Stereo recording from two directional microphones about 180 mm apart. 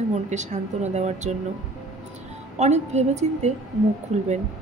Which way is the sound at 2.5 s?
40° right (ahead or behind).